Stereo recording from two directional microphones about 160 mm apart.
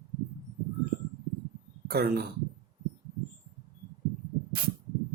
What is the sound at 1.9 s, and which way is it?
Speech, 80° right.